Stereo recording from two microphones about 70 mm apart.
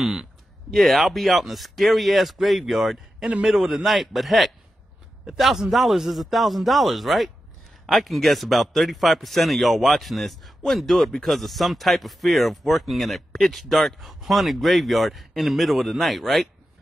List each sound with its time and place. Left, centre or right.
0.0 s speech: centre
3.3 s a man's voice: centre